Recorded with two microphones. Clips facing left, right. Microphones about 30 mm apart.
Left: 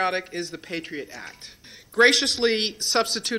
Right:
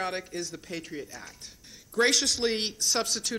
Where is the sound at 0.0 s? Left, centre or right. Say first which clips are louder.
Left 7 dB; left.